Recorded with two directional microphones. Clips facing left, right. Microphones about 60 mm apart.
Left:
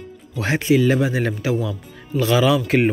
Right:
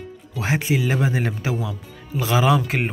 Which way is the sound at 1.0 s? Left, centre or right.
Right.